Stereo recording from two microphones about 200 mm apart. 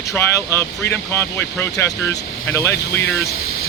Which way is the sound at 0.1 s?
15° left (ahead or behind).